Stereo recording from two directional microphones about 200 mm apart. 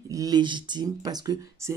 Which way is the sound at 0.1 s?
20° right (ahead or behind).